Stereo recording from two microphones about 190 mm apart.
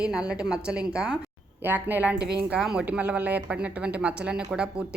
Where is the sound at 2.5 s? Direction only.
5° right (ahead or behind).